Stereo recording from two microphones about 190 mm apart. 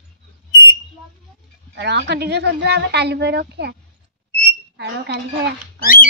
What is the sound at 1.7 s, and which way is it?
A woman's voice, 65° right (ahead or behind).